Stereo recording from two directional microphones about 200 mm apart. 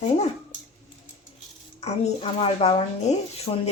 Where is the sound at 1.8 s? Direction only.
30° left (ahead or behind).